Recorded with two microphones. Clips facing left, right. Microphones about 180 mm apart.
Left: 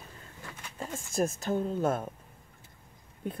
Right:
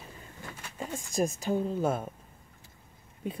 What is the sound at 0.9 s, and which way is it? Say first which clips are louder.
Speech: even; 15° right (ahead or behind).